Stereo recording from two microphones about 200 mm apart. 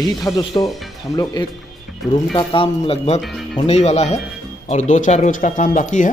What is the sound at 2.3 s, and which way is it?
Speech, 30° left (ahead or behind).